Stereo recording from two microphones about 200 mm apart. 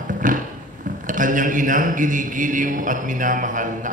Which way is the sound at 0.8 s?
40° right (ahead or behind).